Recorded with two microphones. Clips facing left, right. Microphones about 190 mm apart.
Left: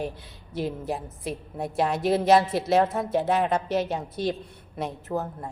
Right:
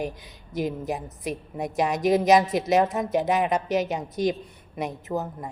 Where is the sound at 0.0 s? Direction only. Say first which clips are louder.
Right 1 dB; 15° right (ahead or behind).